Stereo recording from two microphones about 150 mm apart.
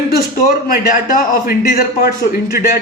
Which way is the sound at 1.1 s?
75° left (ahead or behind).